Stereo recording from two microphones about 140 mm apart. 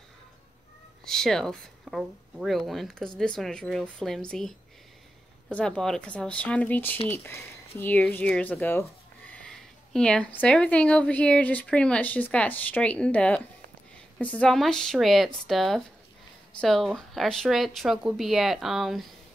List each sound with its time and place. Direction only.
1.0 s speech: 5° left (ahead or behind)